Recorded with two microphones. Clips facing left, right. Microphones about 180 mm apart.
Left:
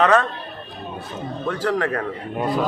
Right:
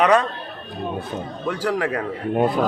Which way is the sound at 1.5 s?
10° right (ahead or behind).